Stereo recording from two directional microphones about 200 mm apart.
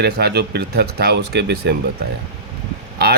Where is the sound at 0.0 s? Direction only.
55° right (ahead or behind).